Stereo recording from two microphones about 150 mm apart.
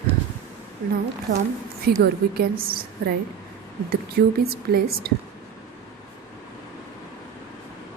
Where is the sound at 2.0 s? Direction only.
90° right.